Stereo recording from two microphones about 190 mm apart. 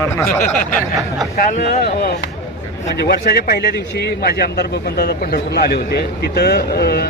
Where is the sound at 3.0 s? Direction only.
55° left (ahead or behind).